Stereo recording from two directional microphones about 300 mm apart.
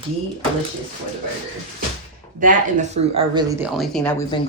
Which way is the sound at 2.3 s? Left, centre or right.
Right.